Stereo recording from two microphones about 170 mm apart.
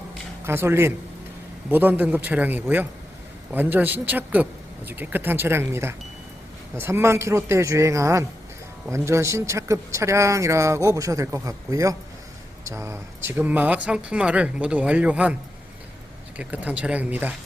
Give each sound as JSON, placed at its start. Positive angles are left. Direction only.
{"t": 0.4, "sound": "speech", "side_deg": -15}
{"t": 16.4, "sound": "speech", "side_deg": -10}